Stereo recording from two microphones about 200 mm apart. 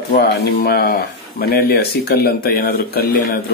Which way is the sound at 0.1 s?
50° left (ahead or behind).